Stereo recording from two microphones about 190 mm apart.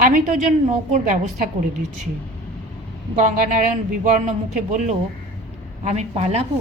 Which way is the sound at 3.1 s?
40° right (ahead or behind).